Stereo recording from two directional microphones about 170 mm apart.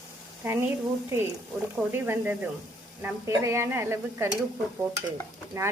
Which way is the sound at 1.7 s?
10° right (ahead or behind).